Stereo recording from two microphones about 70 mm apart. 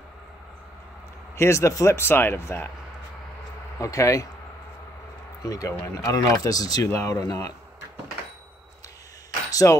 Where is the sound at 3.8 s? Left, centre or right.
Left.